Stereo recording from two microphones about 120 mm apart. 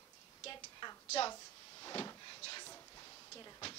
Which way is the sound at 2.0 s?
35° left (ahead or behind).